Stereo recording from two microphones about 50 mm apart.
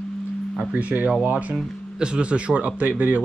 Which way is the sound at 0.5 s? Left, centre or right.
Right.